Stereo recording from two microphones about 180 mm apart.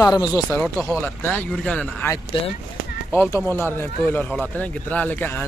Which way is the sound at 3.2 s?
15° left (ahead or behind).